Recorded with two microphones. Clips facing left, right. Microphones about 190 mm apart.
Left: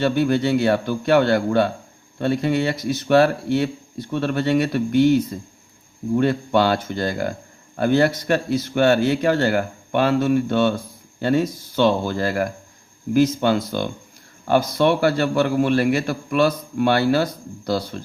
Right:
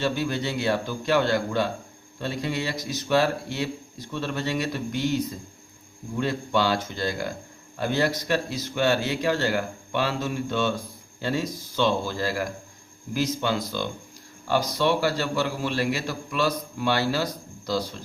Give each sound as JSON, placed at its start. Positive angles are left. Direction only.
{"t": 0.0, "sound": "speech", "side_deg": 55}